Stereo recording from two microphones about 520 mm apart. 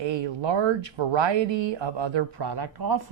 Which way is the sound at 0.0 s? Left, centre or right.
Right.